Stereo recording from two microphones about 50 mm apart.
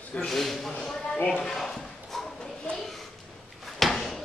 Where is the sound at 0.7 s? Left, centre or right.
Left.